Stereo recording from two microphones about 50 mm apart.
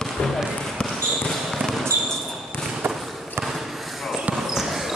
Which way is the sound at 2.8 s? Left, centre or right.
Right.